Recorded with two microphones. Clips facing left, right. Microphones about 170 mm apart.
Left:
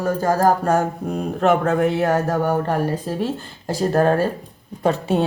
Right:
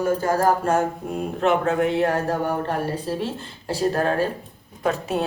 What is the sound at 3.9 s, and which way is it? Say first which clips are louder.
Speech: left 8 dB; 45° left (ahead or behind).